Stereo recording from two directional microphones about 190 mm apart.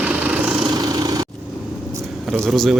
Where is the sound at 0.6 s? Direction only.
20° right (ahead or behind).